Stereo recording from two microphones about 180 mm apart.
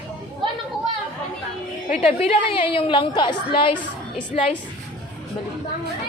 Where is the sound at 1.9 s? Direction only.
35° left (ahead or behind).